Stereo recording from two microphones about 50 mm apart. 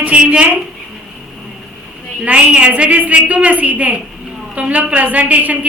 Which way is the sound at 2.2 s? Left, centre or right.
Right.